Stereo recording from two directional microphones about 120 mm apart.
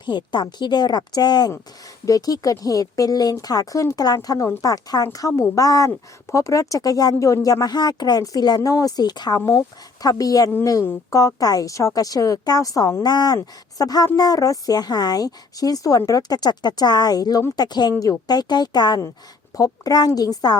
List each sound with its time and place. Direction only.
0.0 s a woman's voice: 40° left (ahead or behind)
9.4 s a woman's voice: 25° left (ahead or behind)